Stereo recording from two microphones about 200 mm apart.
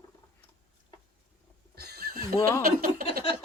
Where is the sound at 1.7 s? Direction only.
55° right (ahead or behind).